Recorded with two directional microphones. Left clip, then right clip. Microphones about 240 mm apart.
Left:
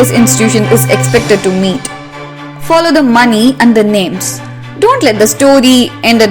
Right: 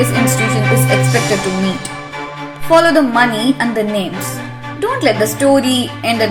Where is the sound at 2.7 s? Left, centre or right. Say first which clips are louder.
Left 3 dB; left.